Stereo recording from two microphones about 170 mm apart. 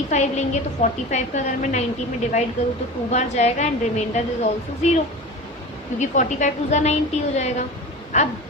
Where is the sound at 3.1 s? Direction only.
40° left (ahead or behind).